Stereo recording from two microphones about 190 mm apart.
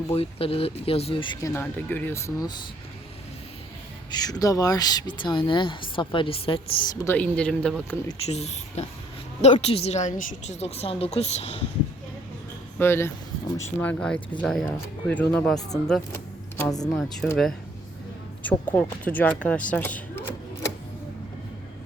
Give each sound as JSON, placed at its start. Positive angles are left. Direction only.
{"t": 0.1, "sound": "speech", "side_deg": 30}
{"t": 4.1, "sound": "speech", "side_deg": 20}
{"t": 7.0, "sound": "speech", "side_deg": 10}
{"t": 8.3, "sound": "a woman's voice", "side_deg": 35}
{"t": 12.8, "sound": "speech", "side_deg": 10}
{"t": 16.8, "sound": "speech", "side_deg": 0}
{"t": 18.7, "sound": "speech", "side_deg": 10}